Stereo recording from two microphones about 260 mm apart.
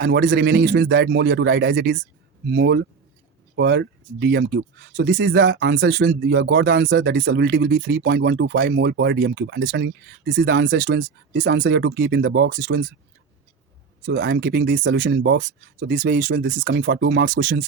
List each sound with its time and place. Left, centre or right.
0.0 s speech: right
14.1 s speech: right